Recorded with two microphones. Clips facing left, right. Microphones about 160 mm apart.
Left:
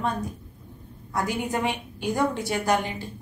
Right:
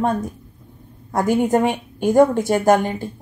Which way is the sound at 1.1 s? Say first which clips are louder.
Right 10 dB; 50° right (ahead or behind).